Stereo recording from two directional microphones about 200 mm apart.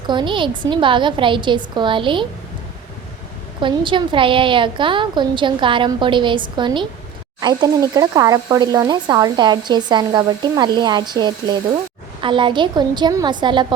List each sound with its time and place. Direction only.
0.1 s speech: 25° right (ahead or behind)
3.6 s speech: 25° right (ahead or behind)